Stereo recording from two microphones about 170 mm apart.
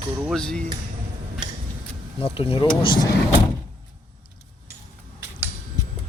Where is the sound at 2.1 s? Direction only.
30° left (ahead or behind).